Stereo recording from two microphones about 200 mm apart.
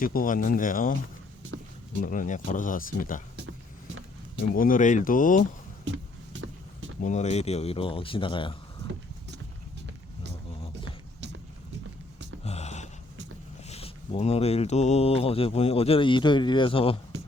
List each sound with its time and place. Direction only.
0.0 s speech: 45° left (ahead or behind)
2.0 s speech: 40° left (ahead or behind)
4.5 s speech: 45° left (ahead or behind)
7.0 s speech: 35° left (ahead or behind)
12.5 s a sound: 35° left (ahead or behind)
13.7 s speech: 30° left (ahead or behind)